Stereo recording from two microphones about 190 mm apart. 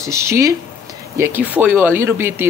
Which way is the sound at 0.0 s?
15° right (ahead or behind).